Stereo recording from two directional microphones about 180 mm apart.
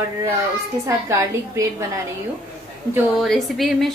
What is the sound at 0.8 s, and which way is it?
A woman's voice, 15° right (ahead or behind).